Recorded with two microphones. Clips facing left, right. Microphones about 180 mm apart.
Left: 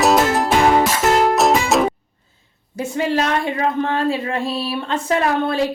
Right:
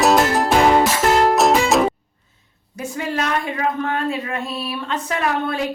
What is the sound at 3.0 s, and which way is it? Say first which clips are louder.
A woman's voice: left 4 dB; 30° left (ahead or behind).